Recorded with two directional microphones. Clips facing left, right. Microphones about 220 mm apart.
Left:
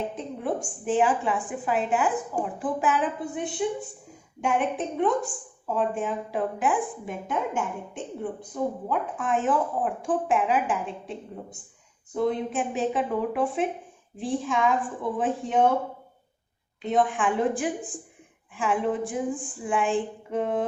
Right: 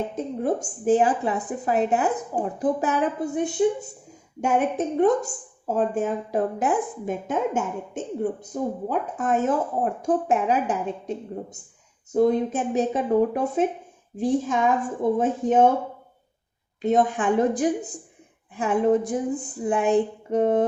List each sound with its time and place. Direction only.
0.2 s a woman's voice: 40° right (ahead or behind)
16.8 s a woman's voice: 40° right (ahead or behind)